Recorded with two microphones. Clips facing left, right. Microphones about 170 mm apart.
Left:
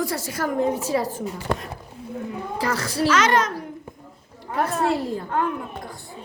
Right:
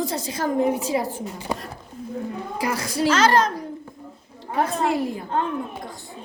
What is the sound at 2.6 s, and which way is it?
Speech, 10° right (ahead or behind).